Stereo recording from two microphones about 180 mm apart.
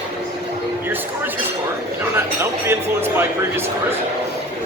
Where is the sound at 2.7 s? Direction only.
15° right (ahead or behind).